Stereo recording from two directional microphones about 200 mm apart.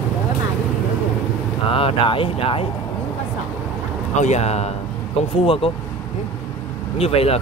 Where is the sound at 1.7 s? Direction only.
25° left (ahead or behind).